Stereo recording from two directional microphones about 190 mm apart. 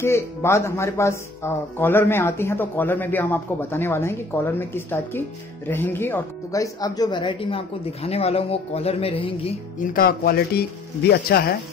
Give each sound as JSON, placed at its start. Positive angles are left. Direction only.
{"t": 0.0, "sound": "speech", "side_deg": 15}
{"t": 9.8, "sound": "speech", "side_deg": 50}